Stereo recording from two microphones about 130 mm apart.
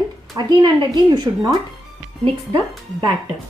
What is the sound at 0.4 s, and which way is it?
Speech, 35° right (ahead or behind).